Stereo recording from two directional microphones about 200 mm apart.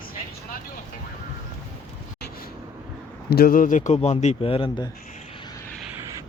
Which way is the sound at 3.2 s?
50° left (ahead or behind).